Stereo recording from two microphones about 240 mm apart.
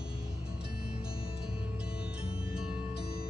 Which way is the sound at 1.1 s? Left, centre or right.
Left.